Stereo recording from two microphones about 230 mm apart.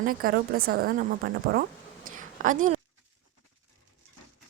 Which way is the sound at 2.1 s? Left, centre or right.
Right.